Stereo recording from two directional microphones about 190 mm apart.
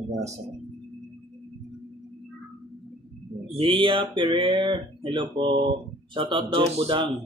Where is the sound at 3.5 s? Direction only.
30° right (ahead or behind).